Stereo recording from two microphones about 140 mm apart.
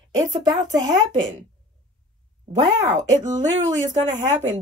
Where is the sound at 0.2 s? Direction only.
30° right (ahead or behind).